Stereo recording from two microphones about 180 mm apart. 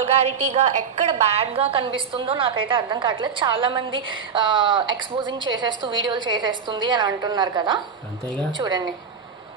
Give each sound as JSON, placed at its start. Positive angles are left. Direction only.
{"t": 0.0, "sound": "a woman's voice", "side_deg": -35}